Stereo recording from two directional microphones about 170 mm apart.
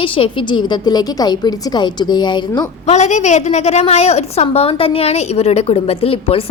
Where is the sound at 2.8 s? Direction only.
40° left (ahead or behind).